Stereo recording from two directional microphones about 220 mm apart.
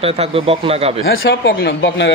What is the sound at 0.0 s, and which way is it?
Speech, 25° right (ahead or behind).